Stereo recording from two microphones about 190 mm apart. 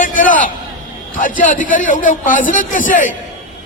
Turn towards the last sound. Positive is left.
turn(degrees=45)  # may be behind; listen again after turning